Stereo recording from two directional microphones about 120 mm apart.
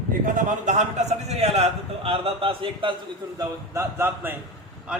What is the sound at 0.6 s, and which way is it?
Speech, 80° right.